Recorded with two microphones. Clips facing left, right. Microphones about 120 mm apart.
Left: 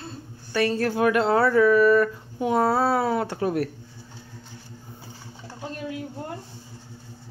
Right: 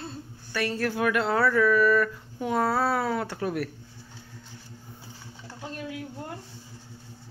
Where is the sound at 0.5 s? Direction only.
25° left (ahead or behind).